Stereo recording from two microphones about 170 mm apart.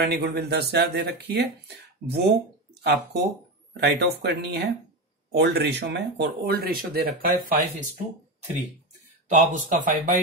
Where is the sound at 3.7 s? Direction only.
75° right (ahead or behind).